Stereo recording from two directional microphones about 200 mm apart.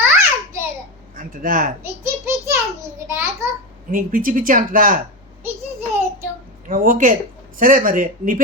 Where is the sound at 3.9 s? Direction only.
45° right (ahead or behind).